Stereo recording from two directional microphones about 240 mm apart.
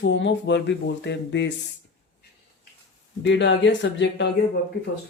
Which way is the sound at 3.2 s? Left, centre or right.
Left.